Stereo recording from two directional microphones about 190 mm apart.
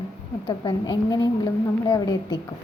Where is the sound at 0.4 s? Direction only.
20° left (ahead or behind).